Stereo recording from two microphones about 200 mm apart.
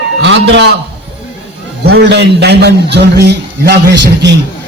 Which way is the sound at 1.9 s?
55° right (ahead or behind).